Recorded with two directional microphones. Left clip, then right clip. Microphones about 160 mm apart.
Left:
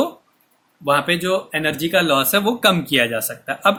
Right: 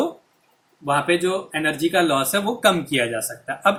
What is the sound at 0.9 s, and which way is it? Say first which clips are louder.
Speech: left 2 dB; 65° left (ahead or behind).